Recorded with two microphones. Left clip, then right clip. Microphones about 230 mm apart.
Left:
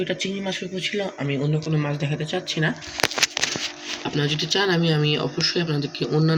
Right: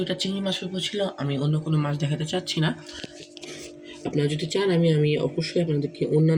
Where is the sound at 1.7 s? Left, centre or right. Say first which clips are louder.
Left 2 dB; right.